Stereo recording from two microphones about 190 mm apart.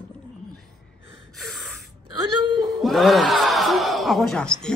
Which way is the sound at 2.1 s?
25° right (ahead or behind).